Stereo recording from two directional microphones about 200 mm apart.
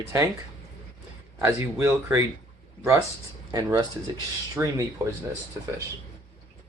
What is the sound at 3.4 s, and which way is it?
Speech, 20° right (ahead or behind).